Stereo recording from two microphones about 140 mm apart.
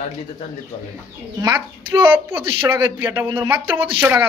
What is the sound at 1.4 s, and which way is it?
Speech, 30° right (ahead or behind).